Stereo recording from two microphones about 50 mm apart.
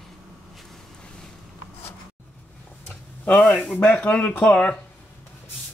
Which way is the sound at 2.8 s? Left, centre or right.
Left.